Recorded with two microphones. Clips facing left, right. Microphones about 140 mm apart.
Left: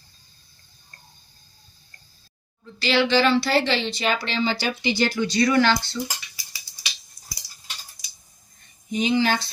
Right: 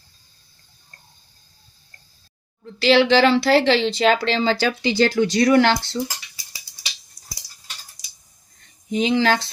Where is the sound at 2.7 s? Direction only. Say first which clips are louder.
Right 5 dB; 90° right.